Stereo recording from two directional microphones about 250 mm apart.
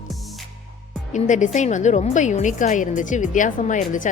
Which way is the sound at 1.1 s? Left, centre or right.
Left.